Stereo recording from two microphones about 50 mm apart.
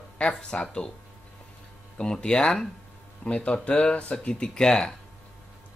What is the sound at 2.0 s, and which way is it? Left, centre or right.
Speech, centre.